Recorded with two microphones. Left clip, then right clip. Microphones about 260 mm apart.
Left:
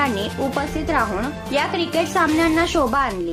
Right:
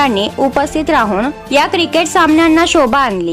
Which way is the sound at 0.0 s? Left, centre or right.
Right.